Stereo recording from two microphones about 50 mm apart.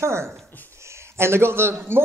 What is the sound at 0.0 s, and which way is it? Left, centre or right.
A woman's voice, right.